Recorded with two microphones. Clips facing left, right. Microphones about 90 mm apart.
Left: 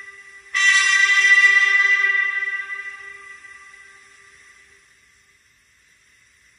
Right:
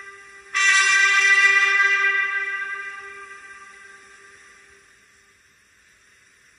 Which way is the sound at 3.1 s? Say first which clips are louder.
Right 3 dB; 50° right (ahead or behind).